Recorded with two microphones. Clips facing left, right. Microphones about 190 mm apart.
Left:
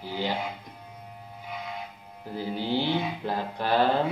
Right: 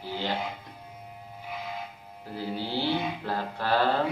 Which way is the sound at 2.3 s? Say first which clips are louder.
Left 3 dB; 15° left (ahead or behind).